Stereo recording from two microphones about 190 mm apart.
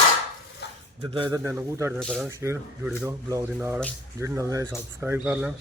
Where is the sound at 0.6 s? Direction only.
60° left (ahead or behind).